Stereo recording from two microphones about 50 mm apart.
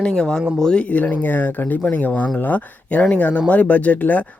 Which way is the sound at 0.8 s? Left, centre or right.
Left.